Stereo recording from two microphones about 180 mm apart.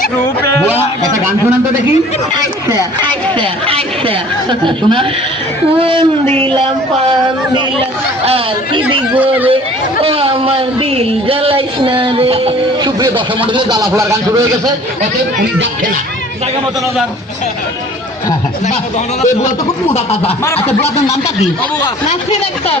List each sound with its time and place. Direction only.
2.6 s speech: 20° right (ahead or behind)
6.2 s speech: 10° left (ahead or behind)
7.1 s speech: 25° right (ahead or behind)
9.1 s speech: 10° right (ahead or behind)
10.0 s a sound: 30° right (ahead or behind)
13.0 s speech: 25° right (ahead or behind)
19.9 s speech: 35° left (ahead or behind)